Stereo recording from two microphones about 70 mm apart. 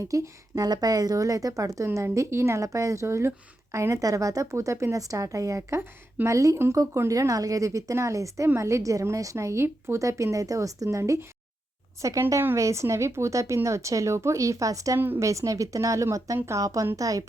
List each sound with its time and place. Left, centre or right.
0.0 s a woman's voice: right
14.9 s a woman's voice: right
15.2 s a woman's voice: right